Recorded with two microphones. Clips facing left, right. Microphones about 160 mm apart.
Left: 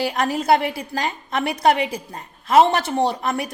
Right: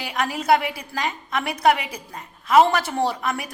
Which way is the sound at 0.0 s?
35° left (ahead or behind).